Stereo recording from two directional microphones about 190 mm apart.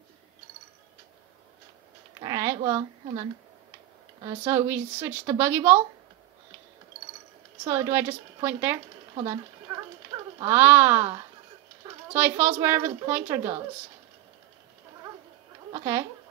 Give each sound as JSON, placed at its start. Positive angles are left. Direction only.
{"t": 2.1, "sound": "a sound", "side_deg": -20}
{"t": 4.2, "sound": "speech", "side_deg": -15}
{"t": 7.6, "sound": "speech", "side_deg": -15}
{"t": 10.4, "sound": "speech", "side_deg": -10}
{"t": 15.7, "sound": "speech", "side_deg": -15}